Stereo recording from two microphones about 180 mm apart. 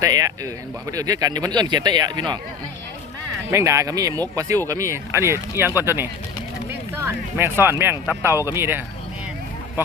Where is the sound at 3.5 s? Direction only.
15° right (ahead or behind).